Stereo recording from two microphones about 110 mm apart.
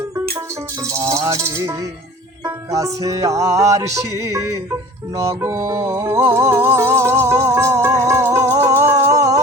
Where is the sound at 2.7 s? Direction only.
30° right (ahead or behind).